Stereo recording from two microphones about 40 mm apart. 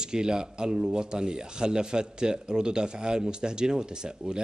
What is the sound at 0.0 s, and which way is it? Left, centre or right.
Speech, centre.